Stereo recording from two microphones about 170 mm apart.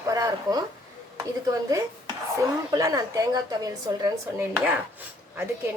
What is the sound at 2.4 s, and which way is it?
A woman's voice, 20° right (ahead or behind).